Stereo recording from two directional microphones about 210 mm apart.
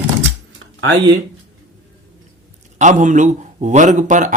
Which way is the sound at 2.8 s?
35° right (ahead or behind).